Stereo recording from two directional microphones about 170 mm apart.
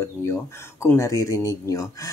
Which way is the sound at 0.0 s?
15° left (ahead or behind).